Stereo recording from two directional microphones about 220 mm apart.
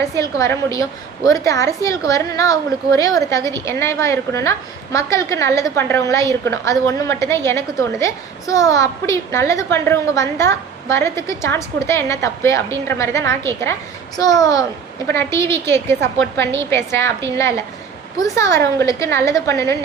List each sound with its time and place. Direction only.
0.2 s a woman's voice: 15° left (ahead or behind)